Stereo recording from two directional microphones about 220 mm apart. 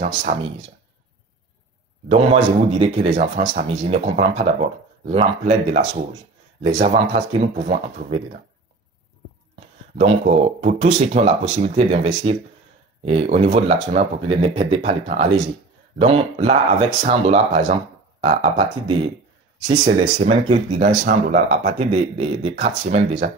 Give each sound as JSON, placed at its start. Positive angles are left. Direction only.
{"t": 0.0, "sound": "speech", "side_deg": -30}
{"t": 2.8, "sound": "speech", "side_deg": -30}
{"t": 9.6, "sound": "speech", "side_deg": -30}
{"t": 20.0, "sound": "speech", "side_deg": -30}